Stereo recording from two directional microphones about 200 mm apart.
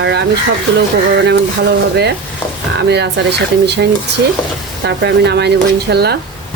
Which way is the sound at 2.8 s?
55° right (ahead or behind).